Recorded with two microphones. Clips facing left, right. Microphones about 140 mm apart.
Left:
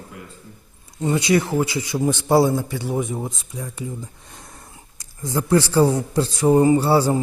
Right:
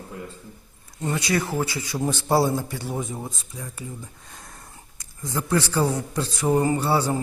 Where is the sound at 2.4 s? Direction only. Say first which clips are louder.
Left 4 dB; centre (ahead or behind).